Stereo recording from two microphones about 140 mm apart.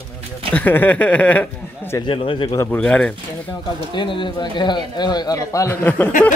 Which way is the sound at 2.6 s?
10° left (ahead or behind).